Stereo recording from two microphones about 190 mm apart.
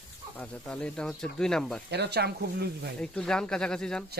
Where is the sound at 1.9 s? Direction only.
60° right (ahead or behind).